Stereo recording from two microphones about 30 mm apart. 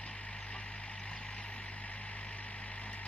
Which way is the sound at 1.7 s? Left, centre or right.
Left.